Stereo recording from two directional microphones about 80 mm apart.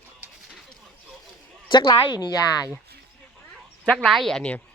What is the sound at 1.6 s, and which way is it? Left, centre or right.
Speech, left.